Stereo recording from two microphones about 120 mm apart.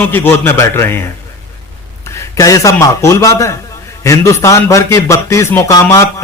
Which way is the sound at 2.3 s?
30° left (ahead or behind).